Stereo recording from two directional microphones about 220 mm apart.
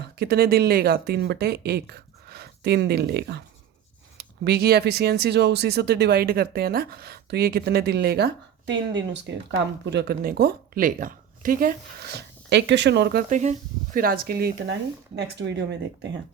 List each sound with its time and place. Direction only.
0.2 s speech: 45° right (ahead or behind)
12.5 s speech: 50° right (ahead or behind)